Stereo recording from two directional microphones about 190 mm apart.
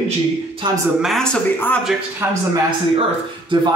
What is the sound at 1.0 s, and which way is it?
Speech, 5° left (ahead or behind).